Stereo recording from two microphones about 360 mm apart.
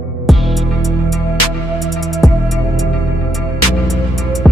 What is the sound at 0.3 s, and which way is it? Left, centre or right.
Music, centre.